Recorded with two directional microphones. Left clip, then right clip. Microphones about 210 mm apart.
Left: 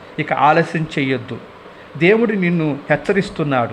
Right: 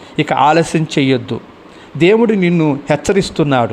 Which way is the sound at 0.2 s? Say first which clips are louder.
Right 3 dB; 20° right (ahead or behind).